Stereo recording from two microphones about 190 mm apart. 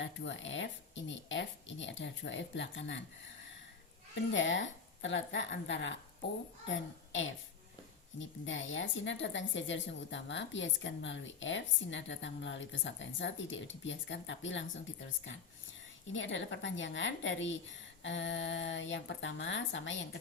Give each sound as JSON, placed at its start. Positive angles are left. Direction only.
{"t": 0.0, "sound": "a woman's voice", "side_deg": 75}
{"t": 4.1, "sound": "a child's voice", "side_deg": 80}
{"t": 16.1, "sound": "a woman's voice", "side_deg": 75}